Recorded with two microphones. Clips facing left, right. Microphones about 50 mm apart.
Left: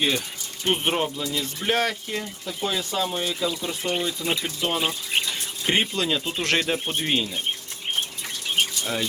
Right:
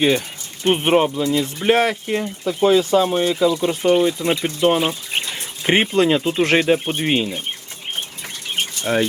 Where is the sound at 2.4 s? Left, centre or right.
Right.